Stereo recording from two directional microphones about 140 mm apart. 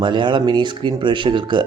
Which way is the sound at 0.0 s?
35° right (ahead or behind).